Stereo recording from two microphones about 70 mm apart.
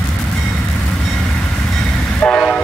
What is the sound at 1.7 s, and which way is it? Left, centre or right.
Train, centre.